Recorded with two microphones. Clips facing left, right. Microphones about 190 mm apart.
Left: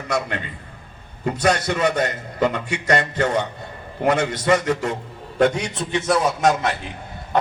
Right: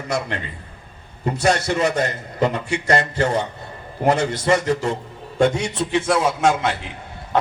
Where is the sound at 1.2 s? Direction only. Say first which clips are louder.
Right 1 dB; 30° right (ahead or behind).